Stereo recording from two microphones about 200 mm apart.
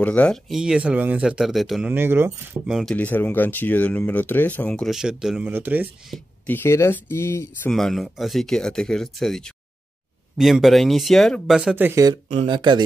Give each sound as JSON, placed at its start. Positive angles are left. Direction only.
{"t": 0.0, "sound": "speech", "side_deg": 5}
{"t": 7.7, "sound": "speech", "side_deg": 0}
{"t": 12.3, "sound": "speech", "side_deg": -30}